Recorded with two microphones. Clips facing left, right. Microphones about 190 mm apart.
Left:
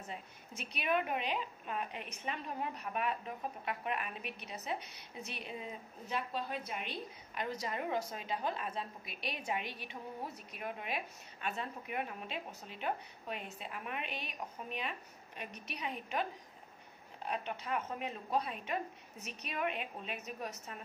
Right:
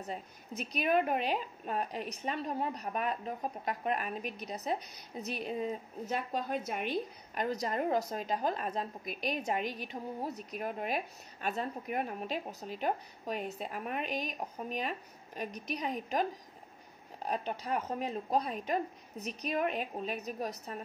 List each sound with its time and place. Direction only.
0.0 s a woman's voice: 40° right (ahead or behind)